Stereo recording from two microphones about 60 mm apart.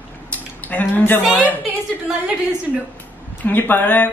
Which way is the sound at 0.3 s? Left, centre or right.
Left.